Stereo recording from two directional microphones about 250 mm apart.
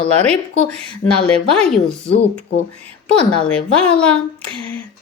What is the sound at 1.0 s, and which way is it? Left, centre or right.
Speech, left.